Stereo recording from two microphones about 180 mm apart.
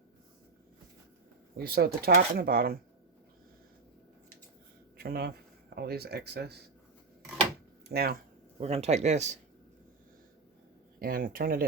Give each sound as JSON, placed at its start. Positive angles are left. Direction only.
{"t": 1.5, "sound": "speech", "side_deg": -60}
{"t": 4.9, "sound": "speech", "side_deg": -60}
{"t": 7.9, "sound": "speech", "side_deg": -60}
{"t": 8.5, "sound": "speech", "side_deg": -35}
{"t": 11.0, "sound": "speech", "side_deg": -55}